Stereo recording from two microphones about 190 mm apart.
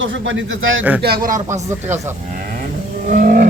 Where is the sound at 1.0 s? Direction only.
50° right (ahead or behind).